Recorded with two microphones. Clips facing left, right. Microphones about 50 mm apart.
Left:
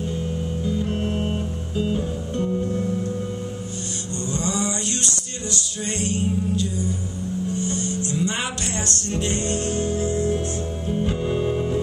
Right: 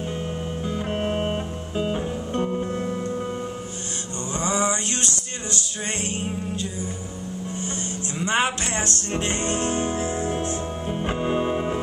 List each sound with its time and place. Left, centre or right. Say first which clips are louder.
0.7 s music: even; right
4.3 s a sound: right 2 dB; right
5.5 s music: left 1 dB; right